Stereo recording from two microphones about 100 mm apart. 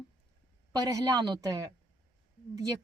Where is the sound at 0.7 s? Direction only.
40° right (ahead or behind).